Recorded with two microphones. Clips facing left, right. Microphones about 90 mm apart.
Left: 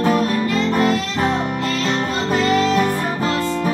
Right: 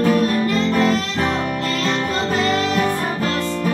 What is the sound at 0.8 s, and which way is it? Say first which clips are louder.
Music: even; 25° left (ahead or behind).